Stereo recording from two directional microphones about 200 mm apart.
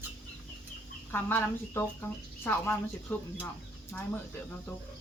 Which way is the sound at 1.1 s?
10° left (ahead or behind).